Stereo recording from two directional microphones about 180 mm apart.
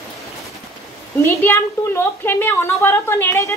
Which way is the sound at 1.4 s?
15° left (ahead or behind).